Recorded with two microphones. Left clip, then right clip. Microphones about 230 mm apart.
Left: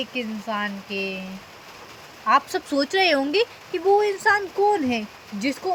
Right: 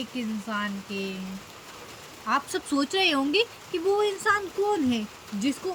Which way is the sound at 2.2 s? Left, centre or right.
Centre.